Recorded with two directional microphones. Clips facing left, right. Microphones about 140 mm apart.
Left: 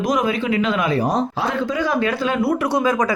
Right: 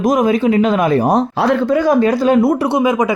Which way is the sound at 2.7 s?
20° right (ahead or behind).